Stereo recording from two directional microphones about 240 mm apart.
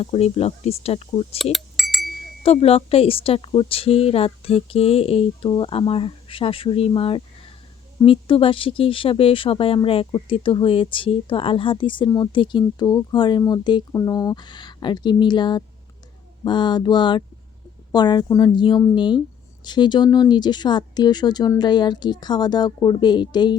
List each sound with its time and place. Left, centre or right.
0.0 s speech: left
1.5 s chink: centre
2.4 s speech: left